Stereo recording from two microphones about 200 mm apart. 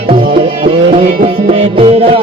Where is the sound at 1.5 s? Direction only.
30° right (ahead or behind).